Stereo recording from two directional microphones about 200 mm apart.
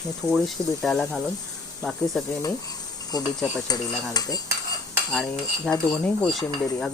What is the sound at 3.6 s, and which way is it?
Stir, 20° left (ahead or behind).